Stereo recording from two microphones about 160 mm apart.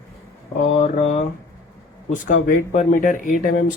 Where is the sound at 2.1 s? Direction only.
55° left (ahead or behind).